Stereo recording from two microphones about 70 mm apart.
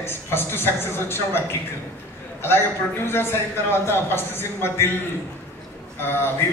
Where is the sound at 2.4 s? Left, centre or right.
Left.